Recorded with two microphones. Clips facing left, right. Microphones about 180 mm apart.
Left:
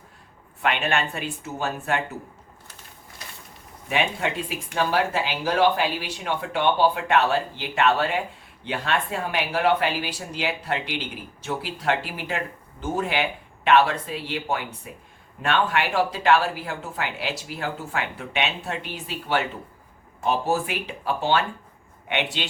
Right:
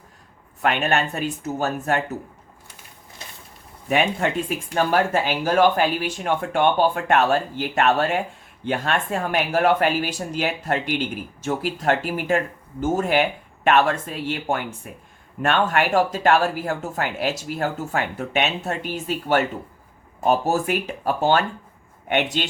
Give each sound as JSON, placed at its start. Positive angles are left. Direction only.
{"t": 0.6, "sound": "speech", "side_deg": -40}
{"t": 3.8, "sound": "speech", "side_deg": -45}